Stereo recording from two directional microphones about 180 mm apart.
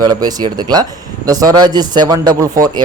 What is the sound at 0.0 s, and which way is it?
Speech, 20° right (ahead or behind).